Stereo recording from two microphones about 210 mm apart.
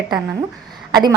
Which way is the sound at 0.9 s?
20° right (ahead or behind).